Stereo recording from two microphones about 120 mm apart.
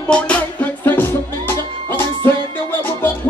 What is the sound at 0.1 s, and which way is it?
Music, 10° left (ahead or behind).